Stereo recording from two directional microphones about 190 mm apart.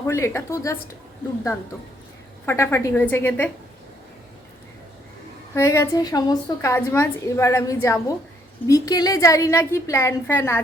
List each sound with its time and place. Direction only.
0.1 s a woman's voice: 15° left (ahead or behind)
2.5 s a woman's voice: 15° left (ahead or behind)
5.5 s a woman's voice: 15° left (ahead or behind)